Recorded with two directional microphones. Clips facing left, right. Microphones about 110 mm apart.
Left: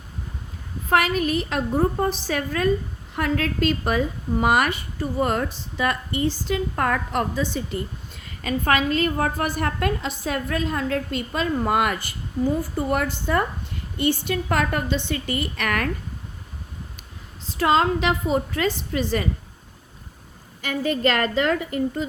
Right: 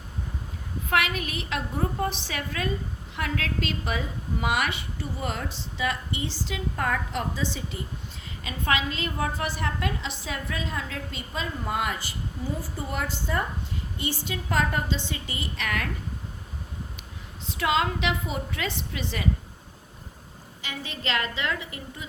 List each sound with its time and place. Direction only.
0.9 s a woman's voice: 40° left (ahead or behind); by 15.9 s 55° left (ahead or behind)
17.4 s a woman's voice: 35° left (ahead or behind)
20.6 s a woman's voice: 50° left (ahead or behind)